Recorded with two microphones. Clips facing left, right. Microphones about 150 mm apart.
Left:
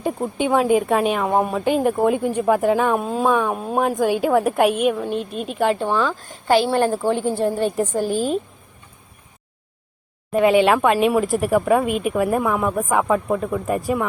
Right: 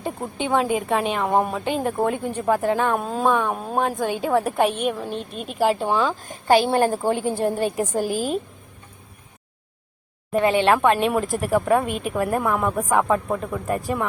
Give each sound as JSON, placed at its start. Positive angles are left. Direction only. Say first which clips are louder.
{"t": 0.0, "sound": "a woman's voice", "louder": "left 5 dB", "side_deg": 10}
{"t": 6.7, "sound": "a woman's voice", "louder": "left 1 dB", "side_deg": -45}
{"t": 6.9, "sound": "a woman's voice", "louder": "left 2 dB", "side_deg": -15}
{"t": 10.4, "sound": "speech", "louder": "left 3 dB", "side_deg": 10}